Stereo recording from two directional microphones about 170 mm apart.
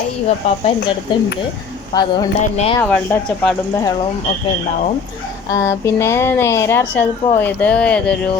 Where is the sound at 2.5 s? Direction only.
35° left (ahead or behind).